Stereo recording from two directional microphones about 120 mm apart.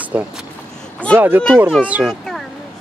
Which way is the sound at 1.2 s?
15° right (ahead or behind).